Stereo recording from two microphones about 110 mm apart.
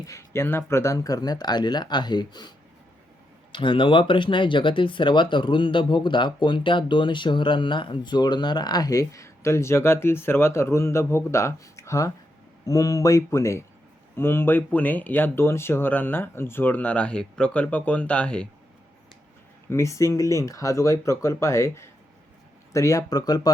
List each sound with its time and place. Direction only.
0.0 s speech: 25° left (ahead or behind)
3.5 s speech: 50° left (ahead or behind); by 18.4 s 10° left (ahead or behind)
19.7 s speech: 30° left (ahead or behind)